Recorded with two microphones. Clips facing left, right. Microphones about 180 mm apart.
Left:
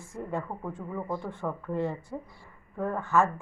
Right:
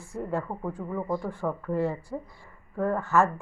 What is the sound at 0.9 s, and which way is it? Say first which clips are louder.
A woman's voice: right 4 dB; 5° right (ahead or behind).